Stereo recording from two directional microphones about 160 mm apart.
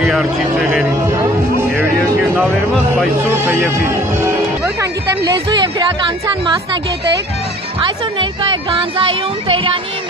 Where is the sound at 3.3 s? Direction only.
15° right (ahead or behind).